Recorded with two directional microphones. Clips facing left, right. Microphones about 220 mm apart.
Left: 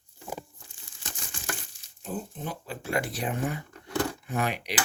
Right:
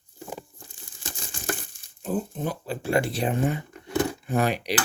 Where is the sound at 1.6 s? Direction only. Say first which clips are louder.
Right 5 dB; 50° right (ahead or behind); by 4.3 s 20° right (ahead or behind).